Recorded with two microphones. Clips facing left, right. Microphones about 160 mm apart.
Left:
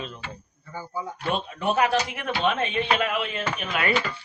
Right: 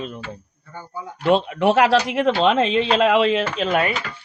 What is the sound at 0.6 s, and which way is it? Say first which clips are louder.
Speech: left 1 dB; 5° left (ahead or behind).